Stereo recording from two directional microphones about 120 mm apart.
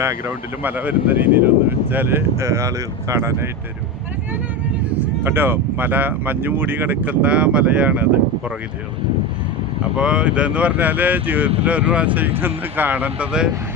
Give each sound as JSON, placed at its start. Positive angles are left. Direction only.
{"t": 0.0, "sound": "speech", "side_deg": -20}
{"t": 4.9, "sound": "speech", "side_deg": -15}
{"t": 10.0, "sound": "speech", "side_deg": -10}